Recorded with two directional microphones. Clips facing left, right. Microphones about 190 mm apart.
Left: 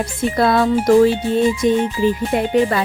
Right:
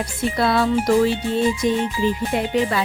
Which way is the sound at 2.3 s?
50° left (ahead or behind).